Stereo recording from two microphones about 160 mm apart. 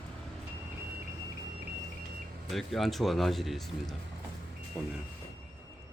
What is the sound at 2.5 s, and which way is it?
Speech, centre (ahead or behind).